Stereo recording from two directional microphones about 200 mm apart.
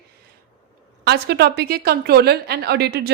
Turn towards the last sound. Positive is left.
turn(degrees=-55)  # may be behind; listen again after turning